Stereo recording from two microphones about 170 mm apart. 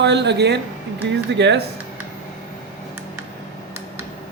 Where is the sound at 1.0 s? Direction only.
90° right.